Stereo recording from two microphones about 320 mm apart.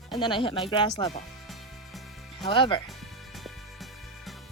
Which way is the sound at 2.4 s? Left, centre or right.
Centre.